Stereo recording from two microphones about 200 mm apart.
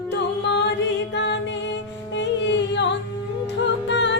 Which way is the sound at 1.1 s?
60° left (ahead or behind).